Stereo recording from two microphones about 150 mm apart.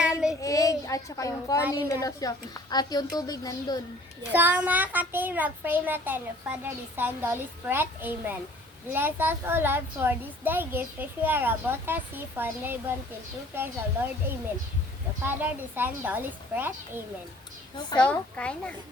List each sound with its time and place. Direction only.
0.4 s a sound: 20° left (ahead or behind)
1.9 s speech: 25° left (ahead or behind)
4.3 s a child's voice: 10° right (ahead or behind)
17.9 s speech: 5° left (ahead or behind)